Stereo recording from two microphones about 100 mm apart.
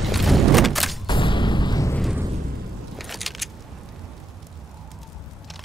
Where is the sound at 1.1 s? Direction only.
55° left (ahead or behind).